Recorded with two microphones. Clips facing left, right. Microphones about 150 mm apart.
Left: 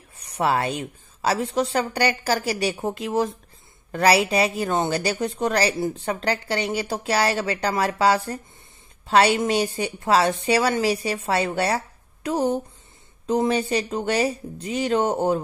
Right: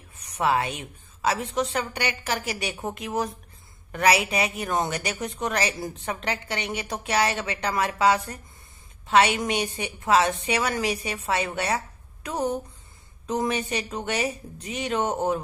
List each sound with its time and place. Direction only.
0.2 s speech: 35° left (ahead or behind)